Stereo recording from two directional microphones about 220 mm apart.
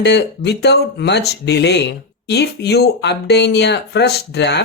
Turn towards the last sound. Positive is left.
turn(degrees=50)  # may be behind; listen again after turning